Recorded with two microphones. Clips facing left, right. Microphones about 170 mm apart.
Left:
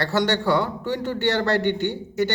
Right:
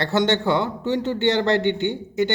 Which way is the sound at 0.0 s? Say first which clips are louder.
Right 2 dB; 20° right (ahead or behind).